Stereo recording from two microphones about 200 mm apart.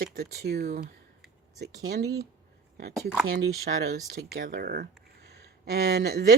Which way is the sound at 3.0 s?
5° right (ahead or behind).